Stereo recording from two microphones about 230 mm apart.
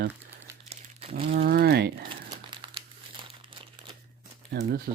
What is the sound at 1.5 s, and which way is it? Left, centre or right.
Speech, right.